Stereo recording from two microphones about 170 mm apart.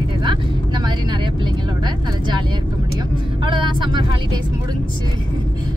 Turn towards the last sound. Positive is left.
turn(degrees=-30)  # may be behind; listen again after turning